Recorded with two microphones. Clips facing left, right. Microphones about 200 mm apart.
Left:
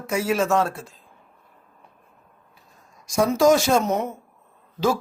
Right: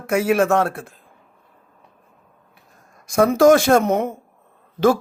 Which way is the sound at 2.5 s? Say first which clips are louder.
Right 2 dB; 60° right (ahead or behind).